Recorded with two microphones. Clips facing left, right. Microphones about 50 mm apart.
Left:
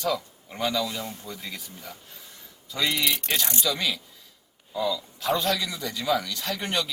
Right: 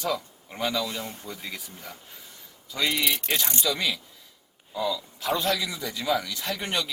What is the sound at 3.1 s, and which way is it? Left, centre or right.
A man's voice, centre.